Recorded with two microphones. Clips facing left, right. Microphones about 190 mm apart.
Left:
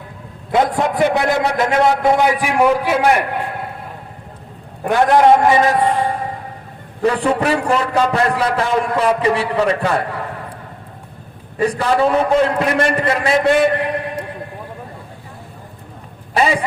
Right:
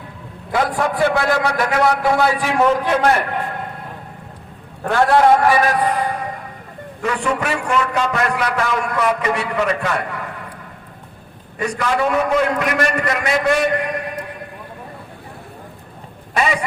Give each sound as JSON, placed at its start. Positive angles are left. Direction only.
{"t": 0.5, "sound": "a man's voice", "side_deg": 20}
{"t": 4.8, "sound": "a man's voice", "side_deg": 15}
{"t": 11.5, "sound": "a man's voice", "side_deg": 30}
{"t": 16.3, "sound": "a sound", "side_deg": 30}